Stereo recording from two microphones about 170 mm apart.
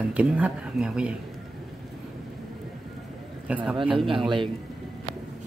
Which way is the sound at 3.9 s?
30° right (ahead or behind).